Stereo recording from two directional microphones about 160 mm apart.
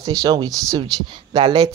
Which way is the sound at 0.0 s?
25° right (ahead or behind).